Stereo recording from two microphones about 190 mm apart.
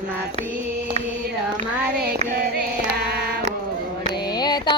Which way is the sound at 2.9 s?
55° right (ahead or behind).